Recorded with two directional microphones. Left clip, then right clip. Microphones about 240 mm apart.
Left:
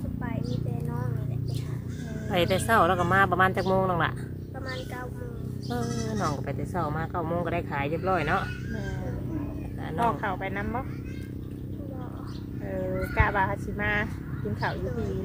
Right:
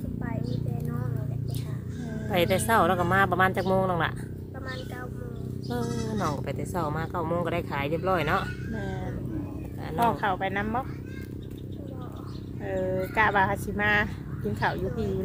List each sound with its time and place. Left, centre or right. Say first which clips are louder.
2.3 s speech: even; centre
5.6 s speech: even; centre
10.0 s speech: right 2 dB; right
12.6 s speech: right 3 dB; right